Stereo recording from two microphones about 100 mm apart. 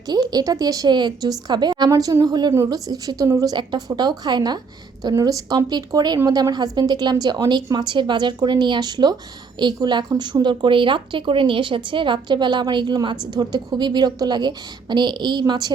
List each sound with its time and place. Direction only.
0.1 s a woman's voice: 40° right (ahead or behind)
1.9 s a woman's voice: 35° right (ahead or behind)